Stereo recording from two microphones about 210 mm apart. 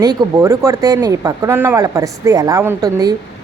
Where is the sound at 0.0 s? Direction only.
15° right (ahead or behind).